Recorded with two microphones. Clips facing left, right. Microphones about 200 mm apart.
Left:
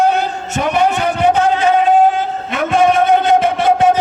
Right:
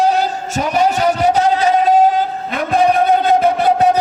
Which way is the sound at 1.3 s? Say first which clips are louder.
Left 1 dB; 35° right (ahead or behind).